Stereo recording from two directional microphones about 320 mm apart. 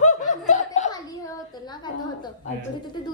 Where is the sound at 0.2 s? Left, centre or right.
Left.